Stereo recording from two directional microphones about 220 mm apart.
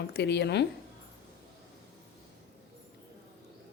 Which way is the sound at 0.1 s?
50° left (ahead or behind).